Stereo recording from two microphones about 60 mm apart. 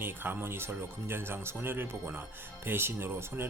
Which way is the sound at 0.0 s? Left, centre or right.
Right.